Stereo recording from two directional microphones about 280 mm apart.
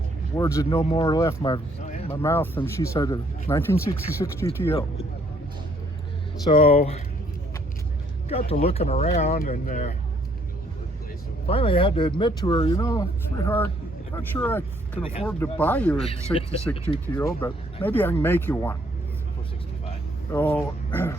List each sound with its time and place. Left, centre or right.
0.3 s speech: centre
2.2 s speech: centre
4.7 s speech: left
6.4 s speech: centre
8.3 s speech: left
11.4 s speech: centre
20.3 s speech: centre